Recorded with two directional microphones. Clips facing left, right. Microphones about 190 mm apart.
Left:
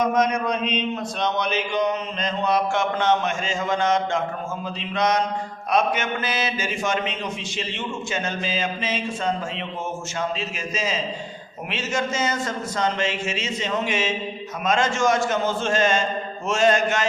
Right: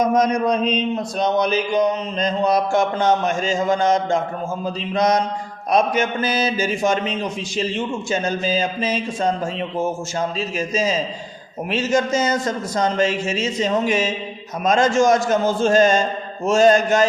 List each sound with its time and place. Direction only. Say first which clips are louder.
0.0 s speech: right 4 dB; 35° right (ahead or behind)
10.8 s speech: right 4 dB; 40° right (ahead or behind)